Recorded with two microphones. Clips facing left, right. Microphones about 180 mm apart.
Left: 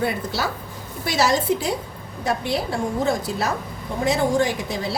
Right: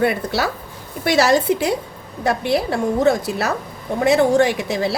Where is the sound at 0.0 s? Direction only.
65° right (ahead or behind).